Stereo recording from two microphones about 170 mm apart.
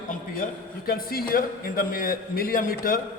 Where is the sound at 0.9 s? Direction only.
60° left (ahead or behind).